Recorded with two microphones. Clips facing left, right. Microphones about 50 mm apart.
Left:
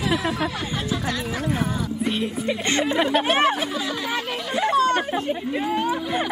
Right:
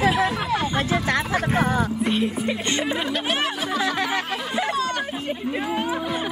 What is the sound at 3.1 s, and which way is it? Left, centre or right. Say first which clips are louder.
Speech: left 5 dB; left.